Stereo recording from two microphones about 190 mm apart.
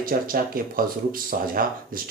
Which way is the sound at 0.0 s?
50° right (ahead or behind).